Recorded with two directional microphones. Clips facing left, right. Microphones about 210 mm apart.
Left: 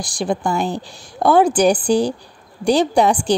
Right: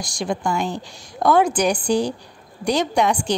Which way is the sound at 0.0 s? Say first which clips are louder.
Left 3 dB; 35° left (ahead or behind).